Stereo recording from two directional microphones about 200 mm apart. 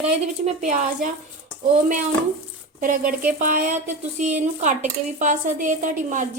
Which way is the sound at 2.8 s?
45° right (ahead or behind).